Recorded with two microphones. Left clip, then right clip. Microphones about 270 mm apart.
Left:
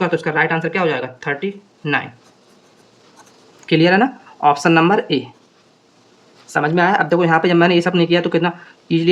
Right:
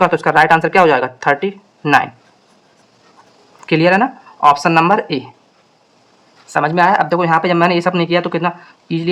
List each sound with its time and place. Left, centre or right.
0.0 s speech: centre
3.7 s speech: centre
6.5 s speech: centre